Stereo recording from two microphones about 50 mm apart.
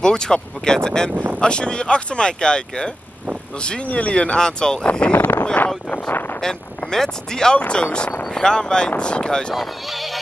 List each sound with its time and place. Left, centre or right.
0.0 s speech: centre
1.1 s speech: right
1.4 s speech: centre
5.1 s speech: left
6.4 s speech: centre
9.5 s speech: centre